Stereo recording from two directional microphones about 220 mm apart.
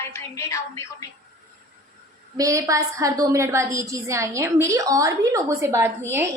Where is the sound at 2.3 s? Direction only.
15° right (ahead or behind).